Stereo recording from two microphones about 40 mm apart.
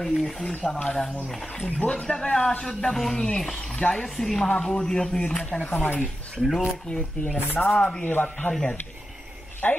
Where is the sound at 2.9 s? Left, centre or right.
Centre.